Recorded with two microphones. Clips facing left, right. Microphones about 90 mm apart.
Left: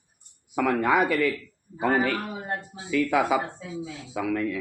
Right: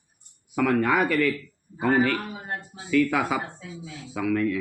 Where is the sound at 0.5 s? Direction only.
20° left (ahead or behind).